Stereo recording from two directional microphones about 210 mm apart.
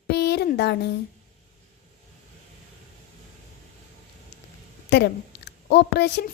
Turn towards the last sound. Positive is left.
turn(degrees=50)  # may be behind; listen again after turning